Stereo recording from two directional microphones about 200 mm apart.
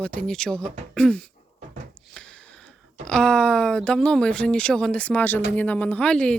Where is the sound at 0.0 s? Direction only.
5° left (ahead or behind).